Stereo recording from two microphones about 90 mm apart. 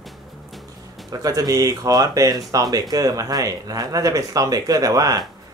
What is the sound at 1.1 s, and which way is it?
Speech, 45° right (ahead or behind).